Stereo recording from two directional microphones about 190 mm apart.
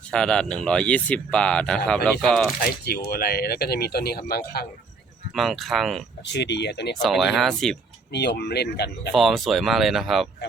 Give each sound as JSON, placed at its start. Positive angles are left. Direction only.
{"t": 0.1, "sound": "speech", "side_deg": 5}
{"t": 2.6, "sound": "speech", "side_deg": 55}
{"t": 5.3, "sound": "speech", "side_deg": 0}
{"t": 6.2, "sound": "speech", "side_deg": 65}
{"t": 7.0, "sound": "speech", "side_deg": 0}
{"t": 8.1, "sound": "speech", "side_deg": 60}
{"t": 9.1, "sound": "speech", "side_deg": 0}